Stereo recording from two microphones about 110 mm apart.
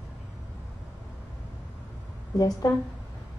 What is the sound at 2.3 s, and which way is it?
Speech, 35° left (ahead or behind).